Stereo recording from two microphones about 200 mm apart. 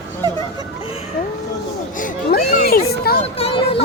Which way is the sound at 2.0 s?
45° left (ahead or behind).